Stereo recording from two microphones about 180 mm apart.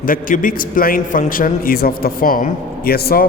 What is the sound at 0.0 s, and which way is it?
A man's voice, 50° left (ahead or behind).